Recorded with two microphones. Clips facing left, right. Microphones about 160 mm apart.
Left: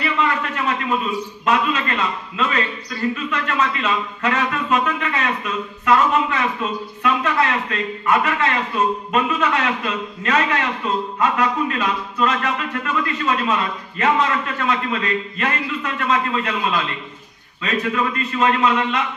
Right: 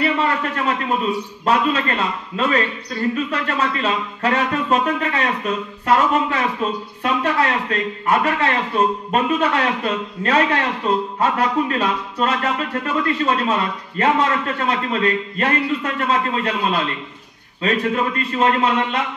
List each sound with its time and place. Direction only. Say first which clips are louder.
0.0 s a sound: right 2 dB; 35° right (ahead or behind)
1.4 s speech: right 2 dB; 35° right (ahead or behind)
17.6 s speech: right 2 dB; 35° right (ahead or behind)